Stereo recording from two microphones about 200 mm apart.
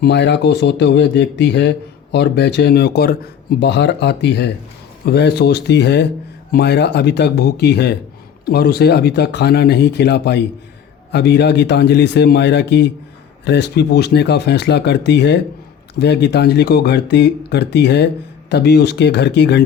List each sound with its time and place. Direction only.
0.0 s speech: 55° left (ahead or behind)